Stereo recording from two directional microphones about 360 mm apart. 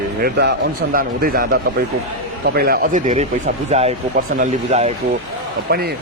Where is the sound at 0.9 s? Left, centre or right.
Right.